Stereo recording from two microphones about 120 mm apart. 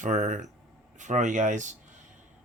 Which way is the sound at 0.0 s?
90° right.